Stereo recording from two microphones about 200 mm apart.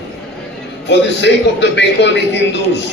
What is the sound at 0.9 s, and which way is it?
A man's voice, 60° left (ahead or behind).